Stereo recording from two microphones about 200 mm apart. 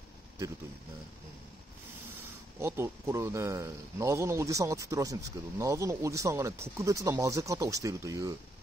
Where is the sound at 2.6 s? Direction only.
15° right (ahead or behind).